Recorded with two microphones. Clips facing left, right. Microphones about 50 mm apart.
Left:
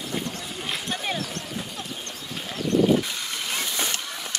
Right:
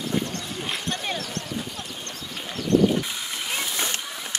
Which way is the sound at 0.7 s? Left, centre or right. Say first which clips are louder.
Left 1 dB; centre.